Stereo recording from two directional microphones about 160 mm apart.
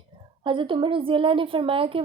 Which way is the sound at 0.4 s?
30° right (ahead or behind).